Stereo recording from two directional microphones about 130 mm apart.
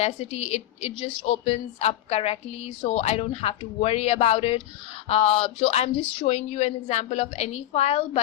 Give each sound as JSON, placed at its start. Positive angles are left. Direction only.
{"t": 0.0, "sound": "a woman's voice", "side_deg": 55}